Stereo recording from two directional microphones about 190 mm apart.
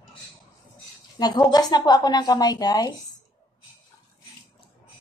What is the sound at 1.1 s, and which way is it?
Speech, 25° left (ahead or behind).